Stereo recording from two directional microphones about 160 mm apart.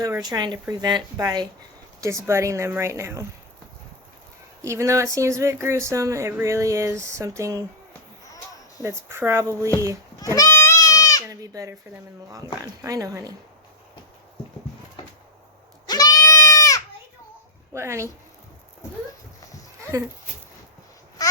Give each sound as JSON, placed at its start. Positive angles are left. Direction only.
{"t": 0.0, "sound": "speech", "side_deg": -25}
{"t": 4.6, "sound": "speech", "side_deg": -20}
{"t": 8.8, "sound": "speech", "side_deg": -15}
{"t": 10.2, "sound": "goat", "side_deg": 20}
{"t": 11.3, "sound": "a sound", "side_deg": -20}
{"t": 12.3, "sound": "speech", "side_deg": -20}
{"t": 15.0, "sound": "cupboard open or close", "side_deg": 30}
{"t": 15.9, "sound": "goat", "side_deg": 25}
{"t": 17.7, "sound": "speech", "side_deg": -15}